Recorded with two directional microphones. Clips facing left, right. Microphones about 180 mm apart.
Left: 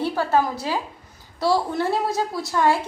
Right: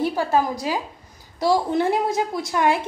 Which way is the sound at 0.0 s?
10° right (ahead or behind).